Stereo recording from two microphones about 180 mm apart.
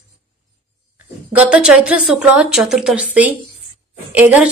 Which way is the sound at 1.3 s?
5° right (ahead or behind).